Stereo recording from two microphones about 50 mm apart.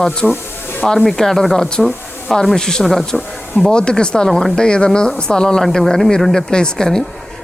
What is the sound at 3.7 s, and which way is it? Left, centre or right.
Speech, centre.